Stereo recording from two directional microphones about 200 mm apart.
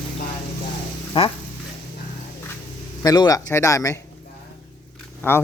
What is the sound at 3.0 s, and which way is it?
Speech, 20° left (ahead or behind).